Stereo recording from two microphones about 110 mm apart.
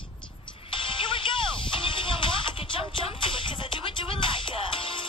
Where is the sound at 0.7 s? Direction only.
50° left (ahead or behind).